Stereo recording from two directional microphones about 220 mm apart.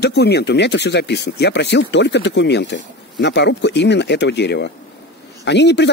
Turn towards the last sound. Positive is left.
turn(degrees=50)  # may be behind; listen again after turning